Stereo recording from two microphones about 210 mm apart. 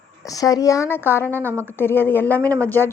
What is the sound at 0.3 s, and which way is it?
A woman's voice, 15° left (ahead or behind).